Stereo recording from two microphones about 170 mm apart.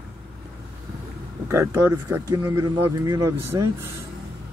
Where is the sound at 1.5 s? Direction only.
15° right (ahead or behind).